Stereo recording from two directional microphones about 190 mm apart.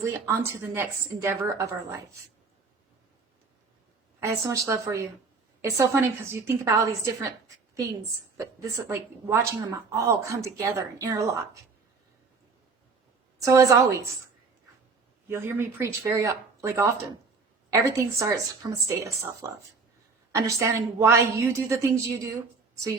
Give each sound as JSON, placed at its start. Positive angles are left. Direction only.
{"t": 0.0, "sound": "a woman's voice", "side_deg": -15}
{"t": 4.2, "sound": "a woman's voice", "side_deg": -15}
{"t": 13.4, "sound": "a woman's voice", "side_deg": -15}
{"t": 15.3, "sound": "a woman's voice", "side_deg": -10}